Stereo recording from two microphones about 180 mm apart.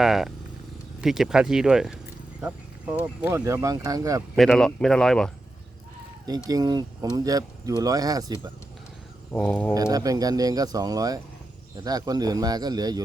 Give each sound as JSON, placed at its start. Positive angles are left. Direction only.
{"t": 0.0, "sound": "speech", "side_deg": 0}
{"t": 3.0, "sound": "speech", "side_deg": -15}
{"t": 4.4, "sound": "speech", "side_deg": 0}
{"t": 6.2, "sound": "speech", "side_deg": -20}
{"t": 9.3, "sound": "speech", "side_deg": 10}
{"t": 9.7, "sound": "speech", "side_deg": -20}